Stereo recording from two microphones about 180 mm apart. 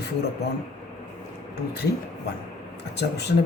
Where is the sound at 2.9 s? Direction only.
65° left (ahead or behind).